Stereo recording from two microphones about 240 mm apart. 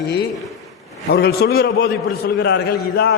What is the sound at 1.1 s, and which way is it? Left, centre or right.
A man's voice, left.